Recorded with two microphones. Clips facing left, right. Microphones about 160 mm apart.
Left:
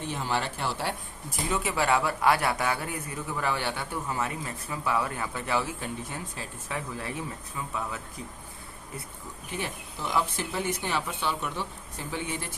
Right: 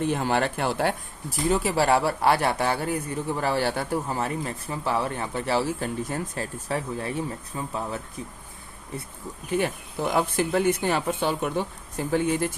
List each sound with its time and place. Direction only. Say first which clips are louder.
0.1 s speech: right 6 dB; 55° right (ahead or behind)
1.5 s a man's voice: right 5 dB; 35° right (ahead or behind)
6.7 s speech: right 5 dB; 30° right (ahead or behind)
9.6 s speech: right 8 dB; 55° right (ahead or behind)